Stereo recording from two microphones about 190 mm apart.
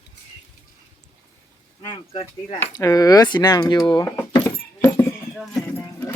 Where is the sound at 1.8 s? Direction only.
25° left (ahead or behind).